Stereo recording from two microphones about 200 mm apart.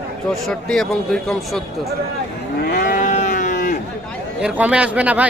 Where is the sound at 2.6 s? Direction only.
45° left (ahead or behind).